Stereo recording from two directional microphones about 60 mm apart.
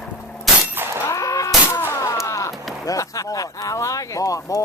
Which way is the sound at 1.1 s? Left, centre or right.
Left.